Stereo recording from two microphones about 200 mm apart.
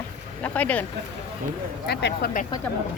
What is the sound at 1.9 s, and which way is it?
Speech, 55° left (ahead or behind).